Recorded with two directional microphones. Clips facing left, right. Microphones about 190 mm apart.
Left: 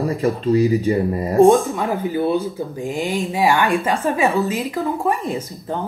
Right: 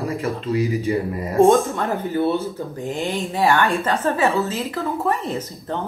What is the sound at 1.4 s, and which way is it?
Speech, 10° left (ahead or behind).